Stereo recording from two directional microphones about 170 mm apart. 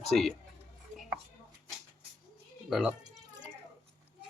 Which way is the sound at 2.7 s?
5° right (ahead or behind).